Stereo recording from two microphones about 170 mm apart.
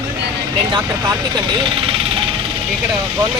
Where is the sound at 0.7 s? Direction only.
25° right (ahead or behind).